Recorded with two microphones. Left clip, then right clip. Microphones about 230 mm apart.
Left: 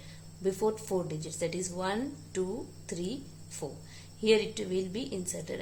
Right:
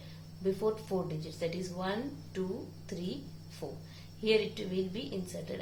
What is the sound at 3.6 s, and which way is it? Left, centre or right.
A woman's voice, left.